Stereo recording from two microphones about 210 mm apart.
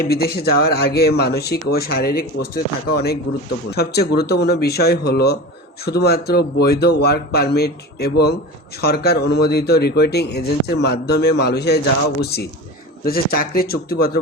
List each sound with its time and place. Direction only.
0.1 s speech: 50° left (ahead or behind)